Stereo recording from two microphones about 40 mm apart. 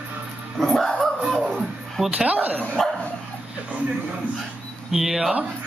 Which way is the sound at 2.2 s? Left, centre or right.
Right.